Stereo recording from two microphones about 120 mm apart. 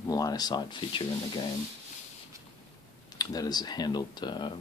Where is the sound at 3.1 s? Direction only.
30° left (ahead or behind).